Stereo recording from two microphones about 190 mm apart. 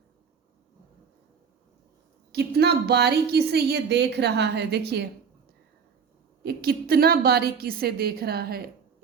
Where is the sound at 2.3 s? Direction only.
60° right (ahead or behind).